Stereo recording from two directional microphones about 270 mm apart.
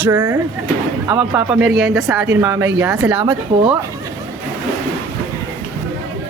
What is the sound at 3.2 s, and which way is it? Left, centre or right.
Speech, centre.